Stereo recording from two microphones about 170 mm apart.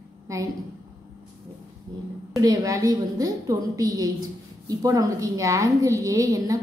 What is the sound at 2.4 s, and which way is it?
A woman's voice, 20° right (ahead or behind).